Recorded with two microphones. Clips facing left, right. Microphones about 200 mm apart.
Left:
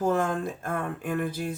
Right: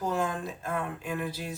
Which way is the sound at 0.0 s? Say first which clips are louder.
Left 5 dB; 50° left (ahead or behind).